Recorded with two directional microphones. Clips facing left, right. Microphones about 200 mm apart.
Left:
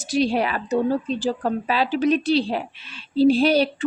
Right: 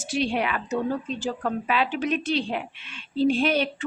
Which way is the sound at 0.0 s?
35° left (ahead or behind).